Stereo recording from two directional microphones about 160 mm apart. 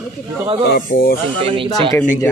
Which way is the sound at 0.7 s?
65° left (ahead or behind).